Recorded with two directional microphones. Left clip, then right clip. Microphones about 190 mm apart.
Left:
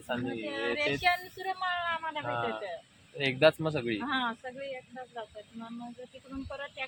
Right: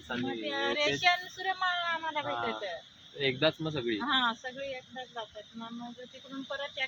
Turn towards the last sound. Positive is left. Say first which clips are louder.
# right 1 dB
turn(degrees=0)  # may be behind; listen again after turning